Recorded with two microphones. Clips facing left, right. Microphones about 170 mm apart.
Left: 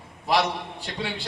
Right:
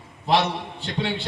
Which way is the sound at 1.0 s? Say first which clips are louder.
Right 5 dB; 25° right (ahead or behind).